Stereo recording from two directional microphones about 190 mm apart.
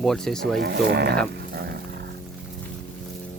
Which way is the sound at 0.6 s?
60° right (ahead or behind).